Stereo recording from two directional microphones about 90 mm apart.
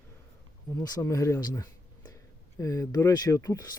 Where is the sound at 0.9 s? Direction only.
35° left (ahead or behind).